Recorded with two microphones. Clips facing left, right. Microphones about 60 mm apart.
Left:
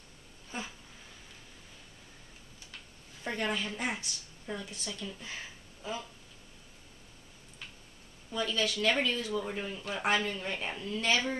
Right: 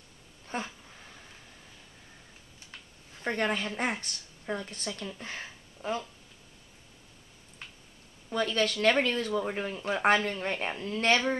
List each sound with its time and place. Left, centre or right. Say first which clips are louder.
0.5 s speech: right 5 dB; right
3.2 s a woman's voice: right 4 dB; right
8.3 s speech: right 4 dB; right
9.8 s speech: right 6 dB; right
10.0 s speech: right 5 dB; right